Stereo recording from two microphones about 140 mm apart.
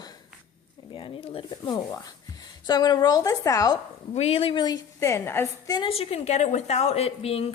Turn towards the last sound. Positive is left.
turn(degrees=45)  # may be behind; listen again after turning